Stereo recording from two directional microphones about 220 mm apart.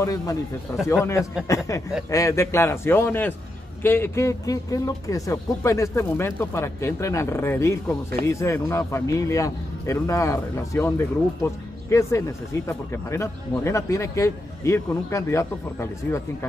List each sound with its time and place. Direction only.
0.0 s a man's voice: 15° left (ahead or behind)